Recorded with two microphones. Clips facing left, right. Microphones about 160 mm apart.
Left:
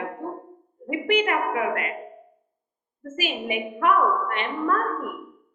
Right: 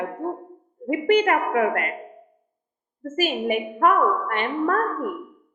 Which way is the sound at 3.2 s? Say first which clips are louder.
Right 5 dB; 45° right (ahead or behind).